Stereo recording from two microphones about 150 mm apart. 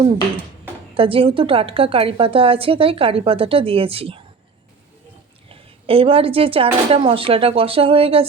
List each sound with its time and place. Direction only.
0.9 s a woman's voice: 40° right (ahead or behind)
5.5 s a woman's voice: 40° right (ahead or behind)